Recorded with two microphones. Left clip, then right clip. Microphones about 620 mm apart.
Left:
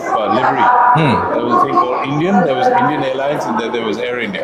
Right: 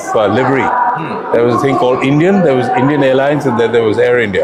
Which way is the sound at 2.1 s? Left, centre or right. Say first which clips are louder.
Right 4 dB; right.